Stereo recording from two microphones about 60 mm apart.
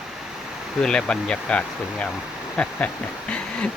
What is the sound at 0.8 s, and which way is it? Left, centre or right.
Speech, centre.